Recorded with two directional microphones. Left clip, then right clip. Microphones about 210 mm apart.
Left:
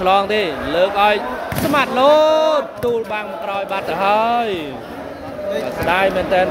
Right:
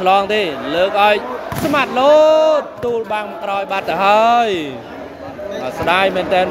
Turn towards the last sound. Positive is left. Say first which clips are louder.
# right 1 dB
turn(degrees=-25)  # may be behind; listen again after turning